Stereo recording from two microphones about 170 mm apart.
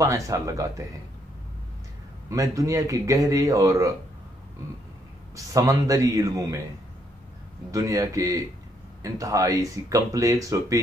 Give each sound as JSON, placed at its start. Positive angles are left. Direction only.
{"t": 0.0, "sound": "speech", "side_deg": -20}
{"t": 2.2, "sound": "speech", "side_deg": -20}
{"t": 5.3, "sound": "speech", "side_deg": -20}
{"t": 7.7, "sound": "speech", "side_deg": -20}